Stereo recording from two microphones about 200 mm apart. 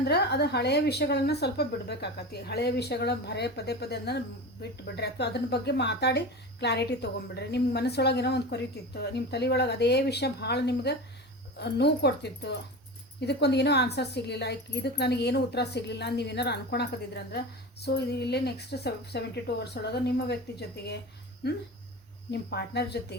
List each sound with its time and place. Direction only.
0.0 s speech: 55° left (ahead or behind)
22.3 s speech: 55° left (ahead or behind)